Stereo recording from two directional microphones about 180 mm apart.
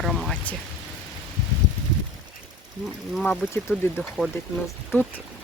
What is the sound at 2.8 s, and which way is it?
Speech, centre (ahead or behind).